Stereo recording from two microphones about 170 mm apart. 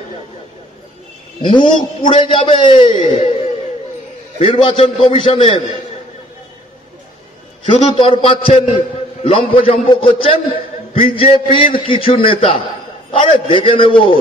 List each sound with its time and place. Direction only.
1.4 s a man's voice: 30° left (ahead or behind)
7.7 s a man's voice: 30° left (ahead or behind)